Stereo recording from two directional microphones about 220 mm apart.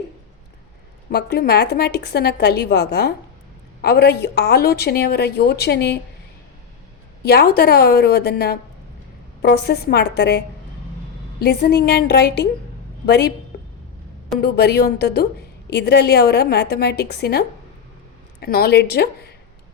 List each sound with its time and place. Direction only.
1.1 s a woman's voice: 45° left (ahead or behind)
7.2 s a woman's voice: 45° left (ahead or behind)
13.5 s a sound: 45° left (ahead or behind)
14.4 s a woman's voice: 45° left (ahead or behind)